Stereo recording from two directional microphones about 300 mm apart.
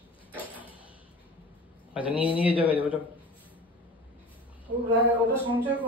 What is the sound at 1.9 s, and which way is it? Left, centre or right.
Speech, centre.